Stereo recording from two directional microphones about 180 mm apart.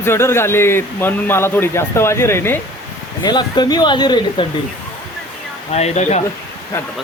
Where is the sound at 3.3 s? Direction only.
25° left (ahead or behind).